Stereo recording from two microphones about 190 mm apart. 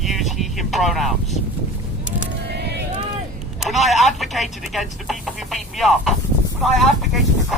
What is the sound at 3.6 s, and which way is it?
Speech, centre (ahead or behind).